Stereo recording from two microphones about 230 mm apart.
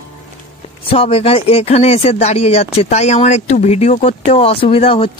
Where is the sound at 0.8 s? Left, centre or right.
Left.